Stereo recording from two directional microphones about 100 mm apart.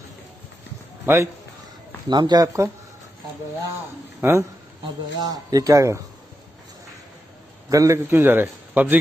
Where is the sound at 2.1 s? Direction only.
45° right (ahead or behind).